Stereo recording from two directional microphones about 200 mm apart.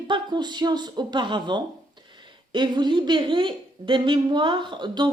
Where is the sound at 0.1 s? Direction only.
20° right (ahead or behind).